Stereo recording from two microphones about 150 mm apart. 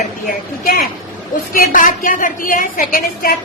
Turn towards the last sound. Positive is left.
turn(degrees=65)  # may be behind; listen again after turning